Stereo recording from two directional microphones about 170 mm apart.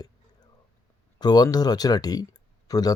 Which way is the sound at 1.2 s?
25° left (ahead or behind).